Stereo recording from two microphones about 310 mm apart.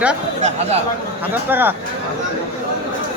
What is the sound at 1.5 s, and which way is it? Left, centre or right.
Speech, centre.